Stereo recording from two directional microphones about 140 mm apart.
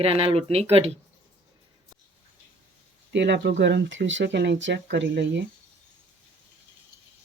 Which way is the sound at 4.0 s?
90° right.